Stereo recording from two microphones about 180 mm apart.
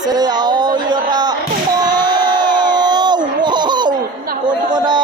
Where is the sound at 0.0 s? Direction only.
20° right (ahead or behind).